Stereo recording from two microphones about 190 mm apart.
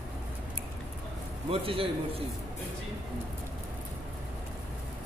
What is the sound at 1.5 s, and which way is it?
Speech, 30° right (ahead or behind).